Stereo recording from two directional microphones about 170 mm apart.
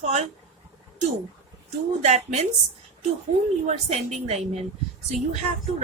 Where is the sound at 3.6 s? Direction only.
45° right (ahead or behind).